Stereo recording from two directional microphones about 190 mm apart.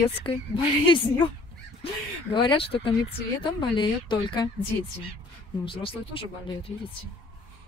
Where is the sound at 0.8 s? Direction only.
25° left (ahead or behind).